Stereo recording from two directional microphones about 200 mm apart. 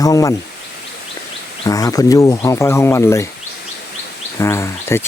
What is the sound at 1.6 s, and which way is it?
Speech, 15° left (ahead or behind).